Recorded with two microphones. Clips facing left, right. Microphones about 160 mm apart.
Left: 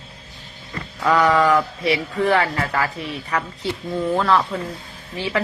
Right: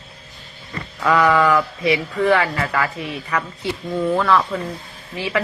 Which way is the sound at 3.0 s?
Centre (ahead or behind).